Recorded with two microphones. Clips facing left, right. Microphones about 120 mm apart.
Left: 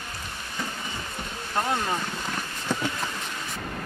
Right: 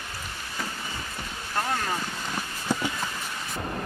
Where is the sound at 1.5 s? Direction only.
20° left (ahead or behind).